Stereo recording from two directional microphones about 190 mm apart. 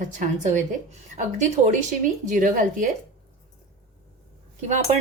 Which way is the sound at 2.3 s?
45° right (ahead or behind).